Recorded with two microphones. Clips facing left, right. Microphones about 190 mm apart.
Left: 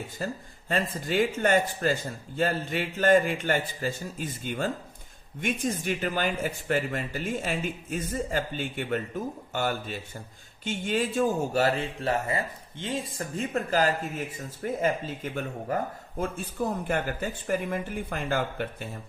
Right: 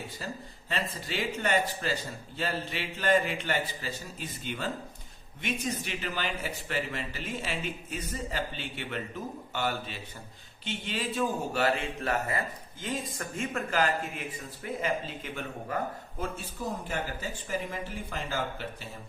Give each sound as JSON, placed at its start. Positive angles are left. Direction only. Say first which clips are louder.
{"t": 0.2, "sound": "a man's voice", "louder": "left 5 dB", "side_deg": 45}
{"t": 16.6, "sound": "speech", "louder": "left 7 dB", "side_deg": 55}